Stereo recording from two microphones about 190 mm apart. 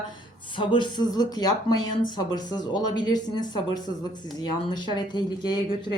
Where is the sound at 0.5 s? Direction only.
25° left (ahead or behind).